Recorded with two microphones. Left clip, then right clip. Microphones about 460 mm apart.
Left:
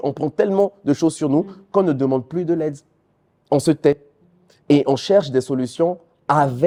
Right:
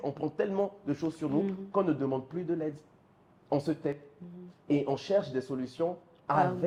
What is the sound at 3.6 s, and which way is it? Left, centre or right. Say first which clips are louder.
A man's voice: left 17 dB; left.